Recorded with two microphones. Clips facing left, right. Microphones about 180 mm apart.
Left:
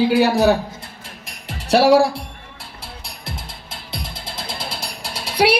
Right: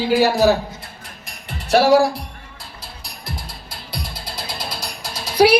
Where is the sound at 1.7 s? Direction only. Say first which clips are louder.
Left 1 dB; 30° left (ahead or behind).